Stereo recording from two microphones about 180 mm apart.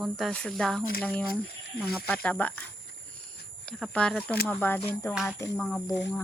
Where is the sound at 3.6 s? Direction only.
5° left (ahead or behind).